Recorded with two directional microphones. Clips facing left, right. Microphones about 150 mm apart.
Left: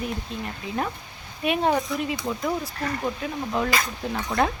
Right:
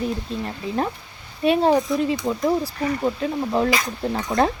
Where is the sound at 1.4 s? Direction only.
35° right (ahead or behind).